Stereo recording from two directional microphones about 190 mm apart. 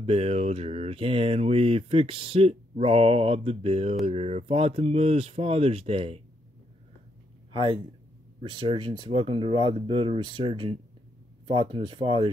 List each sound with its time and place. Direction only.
0.0 s mantra: 30° right (ahead or behind)
7.5 s speech: 25° right (ahead or behind)